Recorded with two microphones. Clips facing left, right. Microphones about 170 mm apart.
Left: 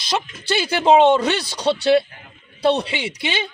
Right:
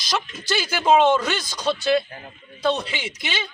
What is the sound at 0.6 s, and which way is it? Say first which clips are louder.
A man's voice: left 4 dB; 25° left (ahead or behind).